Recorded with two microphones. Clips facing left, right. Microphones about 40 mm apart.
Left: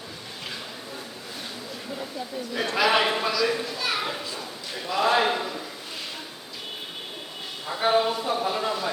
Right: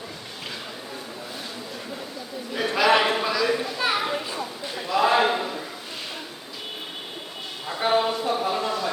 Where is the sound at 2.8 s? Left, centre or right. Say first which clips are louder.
Right 2 dB; centre.